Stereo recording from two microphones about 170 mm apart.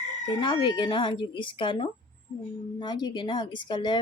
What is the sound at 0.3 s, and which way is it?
Speech, 30° left (ahead or behind).